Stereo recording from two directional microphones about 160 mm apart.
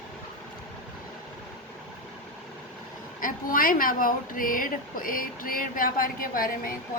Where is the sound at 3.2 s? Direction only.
60° left (ahead or behind).